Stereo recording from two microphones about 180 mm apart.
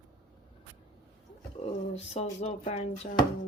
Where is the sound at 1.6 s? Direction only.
35° left (ahead or behind).